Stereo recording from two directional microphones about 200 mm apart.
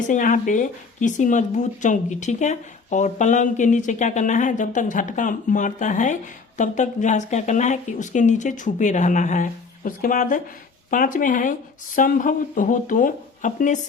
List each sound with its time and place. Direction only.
0.1 s speech: 40° left (ahead or behind)